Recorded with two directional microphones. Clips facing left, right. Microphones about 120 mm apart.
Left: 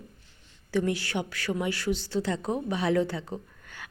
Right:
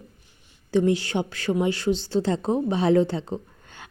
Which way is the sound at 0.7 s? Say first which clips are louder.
Right 6 dB; 25° right (ahead or behind).